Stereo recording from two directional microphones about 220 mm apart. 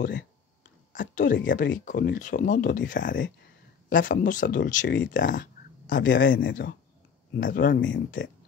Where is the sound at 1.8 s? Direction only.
40° left (ahead or behind).